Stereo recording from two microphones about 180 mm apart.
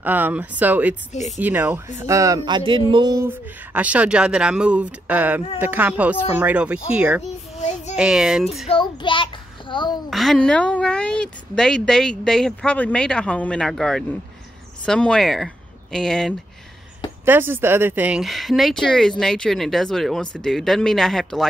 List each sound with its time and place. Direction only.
0.0 s speech: 10° right (ahead or behind)
3.3 s speech: 10° right (ahead or behind)
7.5 s child singing: 40° left (ahead or behind)
7.9 s speech: 5° right (ahead or behind)
8.6 s child singing: 25° left (ahead or behind)
10.0 s speech: centre (ahead or behind)
17.2 s speech: 10° right (ahead or behind)